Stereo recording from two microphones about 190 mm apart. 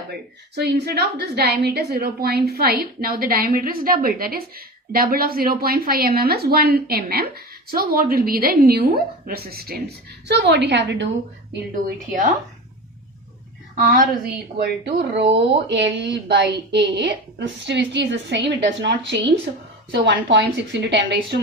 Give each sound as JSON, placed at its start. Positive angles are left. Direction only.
{"t": 0.1, "sound": "a woman's voice", "side_deg": -60}
{"t": 11.7, "sound": "a woman's voice", "side_deg": -40}
{"t": 13.7, "sound": "a woman's voice", "side_deg": -40}
{"t": 14.6, "sound": "a woman's voice", "side_deg": -60}